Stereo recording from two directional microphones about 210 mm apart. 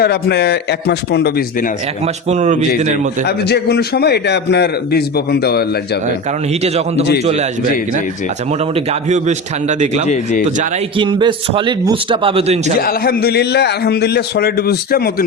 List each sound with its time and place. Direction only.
0.0 s a man's voice: 50° left (ahead or behind)
2.3 s a man's voice: 35° right (ahead or behind)
3.2 s a man's voice: 50° left (ahead or behind)
6.5 s a man's voice: 30° right (ahead or behind)
8.7 s a man's voice: 30° right (ahead or behind)
10.9 s a man's voice: 20° right (ahead or behind)
12.8 s a man's voice: 45° left (ahead or behind)